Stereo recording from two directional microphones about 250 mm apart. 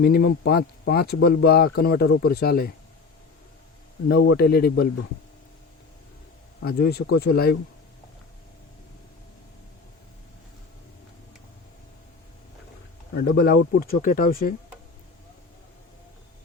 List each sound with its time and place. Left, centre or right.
0.0 s speech: left
4.1 s speech: left
6.6 s speech: left
13.1 s speech: left